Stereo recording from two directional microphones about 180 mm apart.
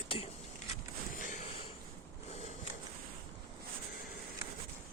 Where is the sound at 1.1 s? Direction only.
45° left (ahead or behind).